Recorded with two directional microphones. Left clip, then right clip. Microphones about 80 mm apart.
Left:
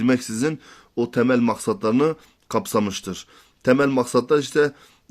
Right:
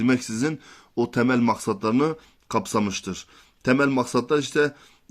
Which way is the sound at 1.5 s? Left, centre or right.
Left.